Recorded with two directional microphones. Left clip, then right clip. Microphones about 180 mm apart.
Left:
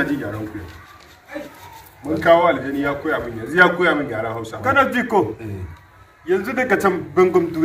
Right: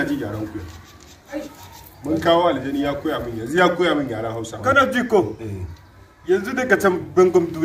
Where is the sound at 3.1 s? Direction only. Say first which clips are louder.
Left 2 dB; 20° left (ahead or behind).